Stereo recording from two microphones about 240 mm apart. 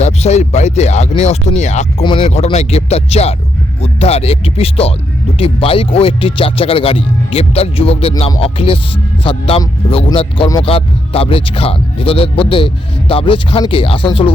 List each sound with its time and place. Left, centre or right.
0.0 s speech: left